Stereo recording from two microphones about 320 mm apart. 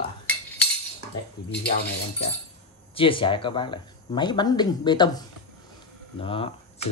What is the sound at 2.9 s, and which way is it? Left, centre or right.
Speech, centre.